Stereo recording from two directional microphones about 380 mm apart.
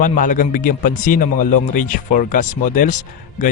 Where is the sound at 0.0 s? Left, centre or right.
Left.